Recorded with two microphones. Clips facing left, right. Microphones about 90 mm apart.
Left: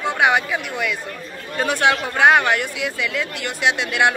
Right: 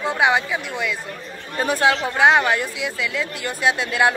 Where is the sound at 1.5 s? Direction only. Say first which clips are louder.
Even; 30° right (ahead or behind).